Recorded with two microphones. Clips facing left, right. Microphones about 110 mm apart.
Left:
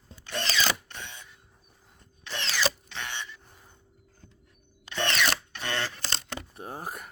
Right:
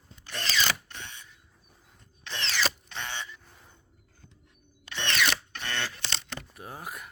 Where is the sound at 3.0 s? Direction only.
25° right (ahead or behind).